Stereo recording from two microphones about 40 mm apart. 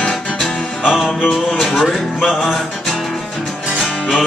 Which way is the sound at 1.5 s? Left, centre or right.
Centre.